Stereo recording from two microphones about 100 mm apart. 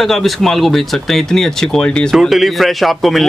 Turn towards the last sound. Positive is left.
turn(degrees=0)  # may be behind; listen again after turning